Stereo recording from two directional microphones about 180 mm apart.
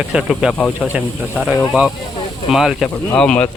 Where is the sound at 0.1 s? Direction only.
5° right (ahead or behind).